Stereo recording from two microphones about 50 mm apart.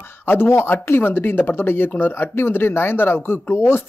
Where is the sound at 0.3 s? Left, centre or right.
Left.